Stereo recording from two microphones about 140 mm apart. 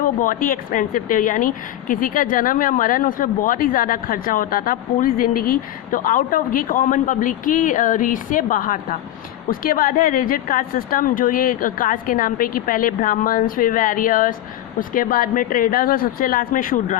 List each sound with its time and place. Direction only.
0.0 s a woman's voice: 75° left (ahead or behind)